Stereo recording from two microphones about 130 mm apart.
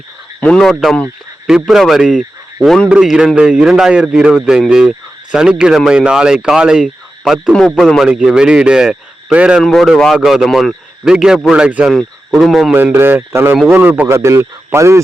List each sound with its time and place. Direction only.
0.3 s a man's voice: 10° left (ahead or behind); by 9.6 s 10° right (ahead or behind)
9.6 s speech: centre (ahead or behind)
12.7 s a man's voice: 15° right (ahead or behind)